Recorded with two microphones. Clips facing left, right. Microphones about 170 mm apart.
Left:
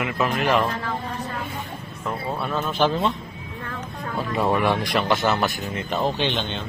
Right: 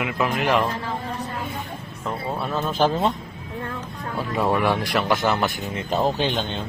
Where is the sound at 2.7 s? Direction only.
40° right (ahead or behind).